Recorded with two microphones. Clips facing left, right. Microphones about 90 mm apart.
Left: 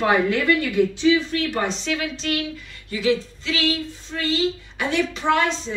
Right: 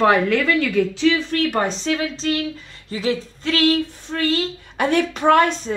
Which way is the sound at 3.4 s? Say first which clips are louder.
Right 8 dB; 50° right (ahead or behind).